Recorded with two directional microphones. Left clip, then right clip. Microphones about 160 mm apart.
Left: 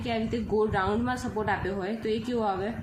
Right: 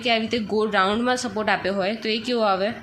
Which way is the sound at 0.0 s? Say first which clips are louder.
Right 8 dB; 25° right (ahead or behind).